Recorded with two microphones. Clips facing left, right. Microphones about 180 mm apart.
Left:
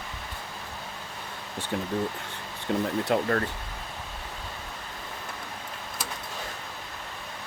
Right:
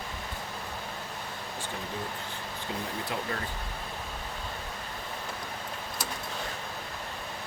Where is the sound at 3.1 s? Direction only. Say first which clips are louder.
Left 10 dB; 60° left (ahead or behind).